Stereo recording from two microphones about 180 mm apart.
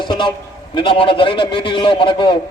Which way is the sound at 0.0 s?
25° left (ahead or behind).